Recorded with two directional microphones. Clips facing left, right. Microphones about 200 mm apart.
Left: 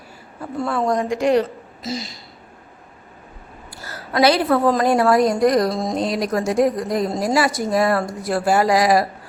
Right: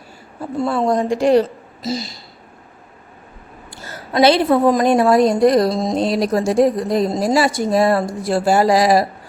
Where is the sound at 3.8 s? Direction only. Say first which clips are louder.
Right 3 dB; 25° right (ahead or behind).